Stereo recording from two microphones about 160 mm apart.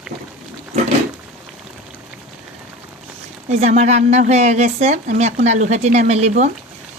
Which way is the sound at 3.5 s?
45° right (ahead or behind).